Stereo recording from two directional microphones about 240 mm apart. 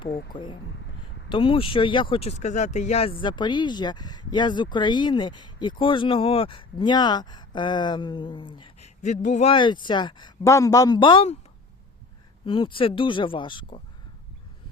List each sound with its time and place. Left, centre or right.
0.1 s speech: left
1.3 s speech: left
12.5 s speech: centre